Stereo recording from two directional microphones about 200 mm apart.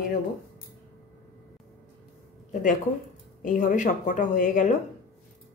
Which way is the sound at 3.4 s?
40° left (ahead or behind).